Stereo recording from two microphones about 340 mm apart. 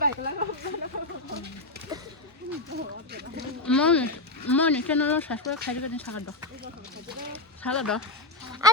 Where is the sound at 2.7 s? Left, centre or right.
Right.